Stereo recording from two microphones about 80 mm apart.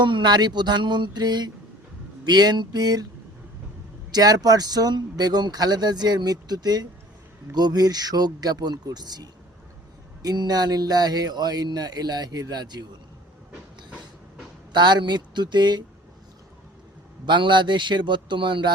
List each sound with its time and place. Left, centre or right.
0.0 s speech: right
4.1 s speech: right
14.7 s speech: right
17.2 s speech: right